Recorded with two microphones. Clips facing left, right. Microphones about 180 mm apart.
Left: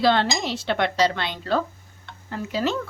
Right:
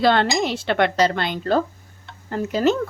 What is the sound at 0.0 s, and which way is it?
Speech, 55° right (ahead or behind).